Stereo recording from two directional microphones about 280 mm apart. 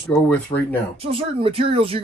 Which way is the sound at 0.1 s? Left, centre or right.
Centre.